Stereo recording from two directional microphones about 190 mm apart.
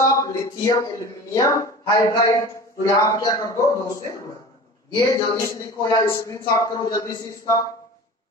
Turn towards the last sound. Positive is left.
turn(degrees=20)  # may be behind; listen again after turning